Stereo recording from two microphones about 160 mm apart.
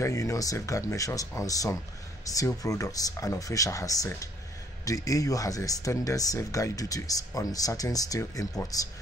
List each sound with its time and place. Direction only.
0.0 s speech: 20° left (ahead or behind)